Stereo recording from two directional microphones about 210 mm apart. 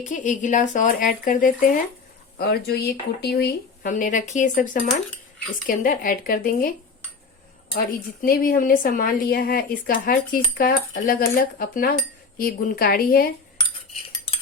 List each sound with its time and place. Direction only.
0.0 s speech: 35° left (ahead or behind)